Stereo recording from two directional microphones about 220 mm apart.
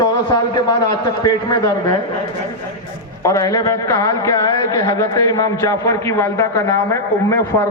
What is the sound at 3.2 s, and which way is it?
Speech, 15° left (ahead or behind).